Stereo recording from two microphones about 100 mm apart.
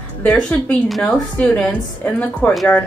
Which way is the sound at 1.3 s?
10° left (ahead or behind).